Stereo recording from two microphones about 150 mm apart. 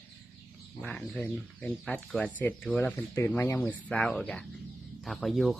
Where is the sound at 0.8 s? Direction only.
5° left (ahead or behind).